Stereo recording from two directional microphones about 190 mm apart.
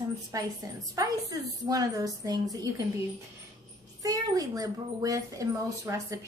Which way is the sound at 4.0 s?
20° right (ahead or behind).